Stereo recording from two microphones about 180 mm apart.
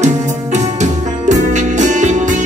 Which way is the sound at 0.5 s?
40° right (ahead or behind).